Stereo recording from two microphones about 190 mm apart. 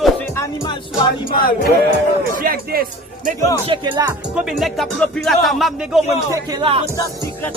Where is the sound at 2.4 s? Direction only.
50° right (ahead or behind).